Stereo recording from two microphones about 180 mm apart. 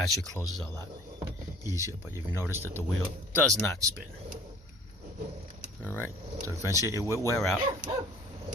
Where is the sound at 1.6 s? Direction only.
15° right (ahead or behind).